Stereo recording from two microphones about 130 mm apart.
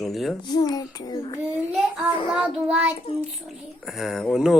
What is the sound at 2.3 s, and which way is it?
Child singing, 10° right (ahead or behind).